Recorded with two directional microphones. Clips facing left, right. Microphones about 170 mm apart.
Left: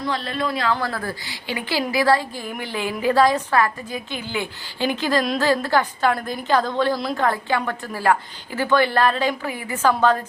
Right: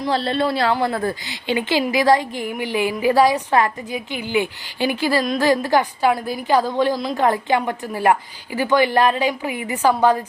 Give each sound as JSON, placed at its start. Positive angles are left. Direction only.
{"t": 0.1, "sound": "a woman's voice", "side_deg": -30}